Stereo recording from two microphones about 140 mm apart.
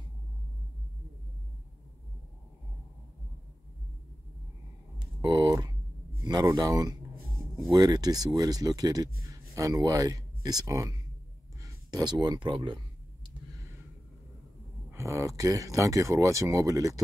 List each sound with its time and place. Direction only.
4.9 s a sound: 30° right (ahead or behind)
6.2 s speech: 30° right (ahead or behind)
11.6 s clicking: 30° right (ahead or behind)
14.9 s speech: 20° right (ahead or behind)